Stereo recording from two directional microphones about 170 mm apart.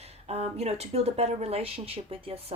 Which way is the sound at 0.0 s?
35° right (ahead or behind).